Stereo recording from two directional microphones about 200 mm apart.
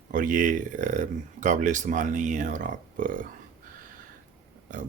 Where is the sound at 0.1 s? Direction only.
40° right (ahead or behind).